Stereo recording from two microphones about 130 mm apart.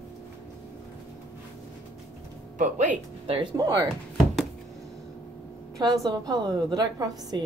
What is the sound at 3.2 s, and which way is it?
Speech, 45° right (ahead or behind).